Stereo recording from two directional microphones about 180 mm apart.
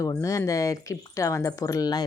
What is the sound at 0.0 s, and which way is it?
Speech, 20° left (ahead or behind).